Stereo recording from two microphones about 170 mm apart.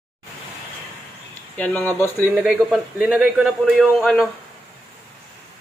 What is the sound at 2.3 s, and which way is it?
A man's voice, 5° right (ahead or behind).